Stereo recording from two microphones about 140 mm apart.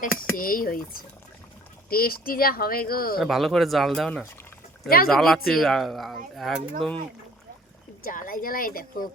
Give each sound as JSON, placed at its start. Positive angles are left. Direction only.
{"t": 0.0, "sound": "speech", "side_deg": 90}
{"t": 1.9, "sound": "speech", "side_deg": 90}
{"t": 3.2, "sound": "speech", "side_deg": 0}
{"t": 8.0, "sound": "speech", "side_deg": 80}